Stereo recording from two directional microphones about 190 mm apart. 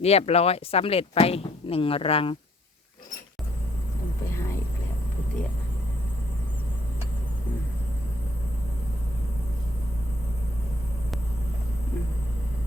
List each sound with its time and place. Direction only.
0.0 s speech: 35° left (ahead or behind)